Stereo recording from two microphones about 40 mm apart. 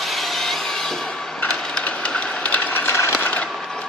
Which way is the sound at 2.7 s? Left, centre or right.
Left.